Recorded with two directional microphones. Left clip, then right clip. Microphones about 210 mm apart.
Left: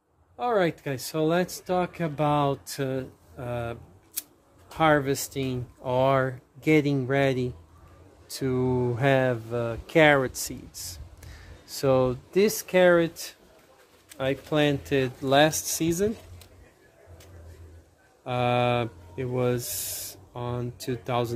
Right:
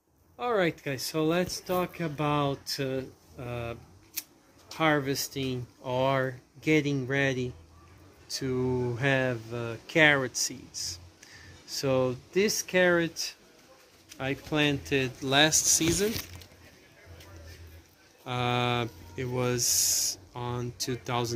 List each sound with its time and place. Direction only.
0.4 s speech: 55° left (ahead or behind)
18.2 s speech: 35° left (ahead or behind)